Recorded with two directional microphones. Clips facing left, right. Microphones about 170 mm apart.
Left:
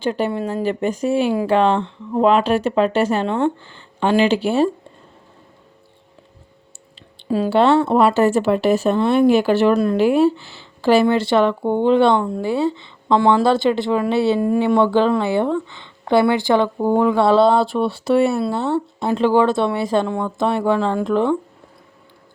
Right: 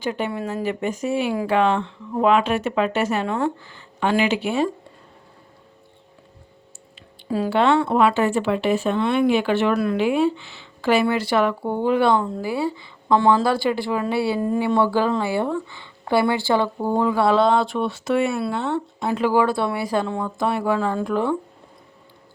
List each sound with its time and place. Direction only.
0.0 s speech: 35° left (ahead or behind)
7.5 s speech: 30° left (ahead or behind)
14.4 s speech: 15° left (ahead or behind)